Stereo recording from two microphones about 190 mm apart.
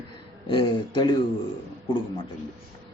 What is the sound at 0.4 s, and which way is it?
Speech, 25° left (ahead or behind).